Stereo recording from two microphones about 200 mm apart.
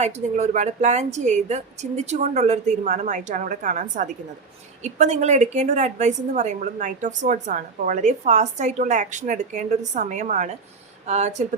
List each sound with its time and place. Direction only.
0.0 s a woman's voice: 35° right (ahead or behind)